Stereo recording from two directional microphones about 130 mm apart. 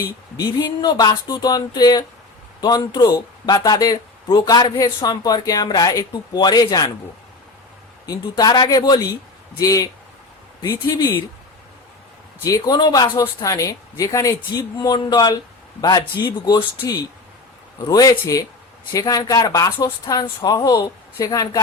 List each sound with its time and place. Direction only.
0.3 s speech: 30° left (ahead or behind)
8.0 s speech: 30° left (ahead or behind)
12.5 s speech: 30° left (ahead or behind)
17.8 s speech: 30° left (ahead or behind)